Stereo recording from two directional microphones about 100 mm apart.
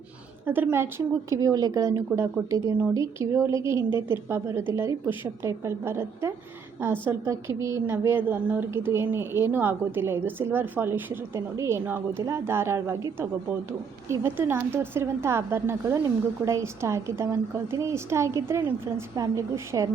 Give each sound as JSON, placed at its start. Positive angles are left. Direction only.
{"t": 0.4, "sound": "a woman's voice", "side_deg": -20}
{"t": 1.4, "sound": "a woman's voice", "side_deg": -40}
{"t": 11.9, "sound": "a woman's voice", "side_deg": -20}